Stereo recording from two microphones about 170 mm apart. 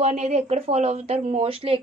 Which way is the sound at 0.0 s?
40° right (ahead or behind).